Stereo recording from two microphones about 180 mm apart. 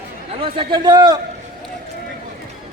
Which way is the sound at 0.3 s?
30° right (ahead or behind).